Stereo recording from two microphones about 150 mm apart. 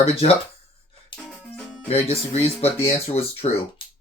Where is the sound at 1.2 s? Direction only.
Centre (ahead or behind).